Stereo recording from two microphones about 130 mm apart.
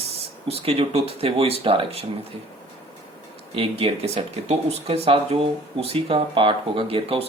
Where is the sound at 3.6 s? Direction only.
50° right (ahead or behind).